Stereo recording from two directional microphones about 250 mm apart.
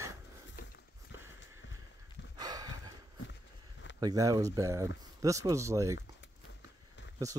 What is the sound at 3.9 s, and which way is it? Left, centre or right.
Speech, centre.